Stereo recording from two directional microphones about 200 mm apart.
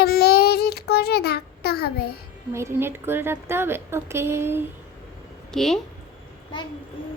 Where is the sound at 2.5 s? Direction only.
15° right (ahead or behind).